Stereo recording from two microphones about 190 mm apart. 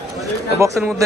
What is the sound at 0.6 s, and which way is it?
Speech, 15° right (ahead or behind).